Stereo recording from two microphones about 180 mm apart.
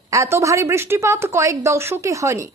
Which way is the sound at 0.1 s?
15° right (ahead or behind).